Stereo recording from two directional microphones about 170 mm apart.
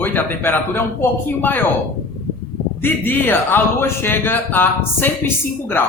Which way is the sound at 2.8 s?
10° left (ahead or behind).